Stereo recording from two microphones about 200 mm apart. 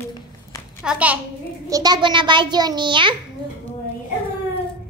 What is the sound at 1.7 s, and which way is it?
A child's voice, 20° right (ahead or behind).